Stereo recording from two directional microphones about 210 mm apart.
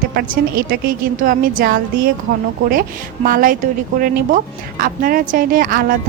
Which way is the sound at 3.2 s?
40° right (ahead or behind).